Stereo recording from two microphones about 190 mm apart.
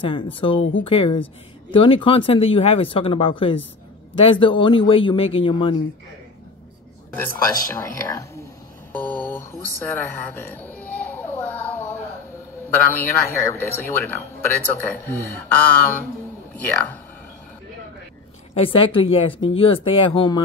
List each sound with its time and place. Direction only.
0.0 s speech: 25° left (ahead or behind)
7.2 s a man's voice: 15° left (ahead or behind)
18.5 s speech: 30° left (ahead or behind)